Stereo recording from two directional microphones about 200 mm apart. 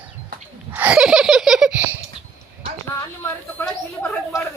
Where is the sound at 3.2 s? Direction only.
10° left (ahead or behind).